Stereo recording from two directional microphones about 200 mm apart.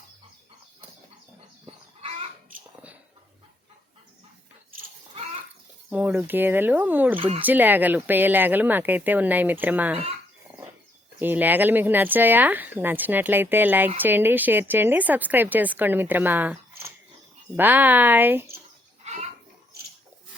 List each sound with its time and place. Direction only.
5.9 s a woman's voice: 10° right (ahead or behind)
11.2 s a woman's voice: 10° right (ahead or behind)
19.1 s a sound: 35° right (ahead or behind)